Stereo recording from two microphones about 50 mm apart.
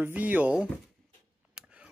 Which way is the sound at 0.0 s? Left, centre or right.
Right.